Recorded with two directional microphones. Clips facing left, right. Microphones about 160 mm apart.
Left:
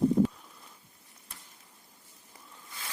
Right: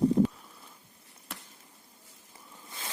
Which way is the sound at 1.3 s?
75° right (ahead or behind).